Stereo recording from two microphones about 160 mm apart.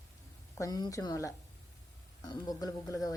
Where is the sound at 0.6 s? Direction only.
25° left (ahead or behind).